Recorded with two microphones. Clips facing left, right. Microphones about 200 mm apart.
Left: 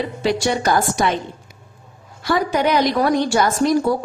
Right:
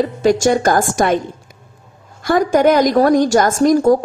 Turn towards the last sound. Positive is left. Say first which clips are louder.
# right 5 dB
turn(degrees=-45)  # may be behind; listen again after turning